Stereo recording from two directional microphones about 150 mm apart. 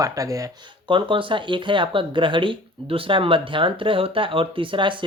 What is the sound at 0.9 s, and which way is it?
Speech, 35° right (ahead or behind).